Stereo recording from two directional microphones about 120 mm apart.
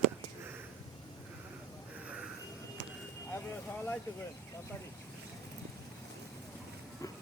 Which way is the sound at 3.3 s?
20° left (ahead or behind).